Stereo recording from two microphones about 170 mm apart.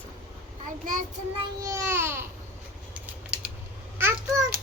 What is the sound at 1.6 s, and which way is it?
Speech, 15° right (ahead or behind).